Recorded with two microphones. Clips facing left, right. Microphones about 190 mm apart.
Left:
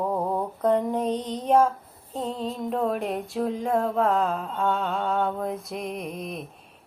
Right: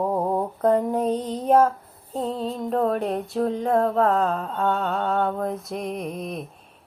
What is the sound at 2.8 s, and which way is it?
Mantra, centre (ahead or behind).